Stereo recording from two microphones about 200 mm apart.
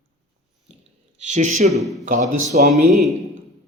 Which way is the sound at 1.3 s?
35° right (ahead or behind).